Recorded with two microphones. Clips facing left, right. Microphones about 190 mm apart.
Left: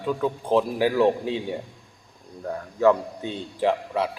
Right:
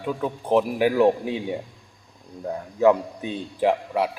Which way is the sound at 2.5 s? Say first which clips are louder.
Right 1 dB; 15° right (ahead or behind).